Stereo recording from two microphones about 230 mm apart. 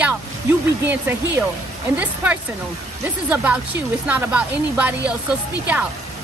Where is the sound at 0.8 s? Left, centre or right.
Centre.